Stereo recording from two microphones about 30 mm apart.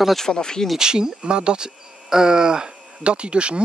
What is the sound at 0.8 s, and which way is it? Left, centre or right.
Speech, right.